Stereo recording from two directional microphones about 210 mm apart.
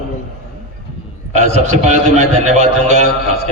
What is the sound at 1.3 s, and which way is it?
A man's voice, 35° right (ahead or behind).